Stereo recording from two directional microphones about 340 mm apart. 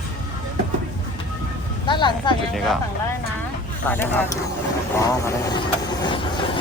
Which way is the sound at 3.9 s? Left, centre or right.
Centre.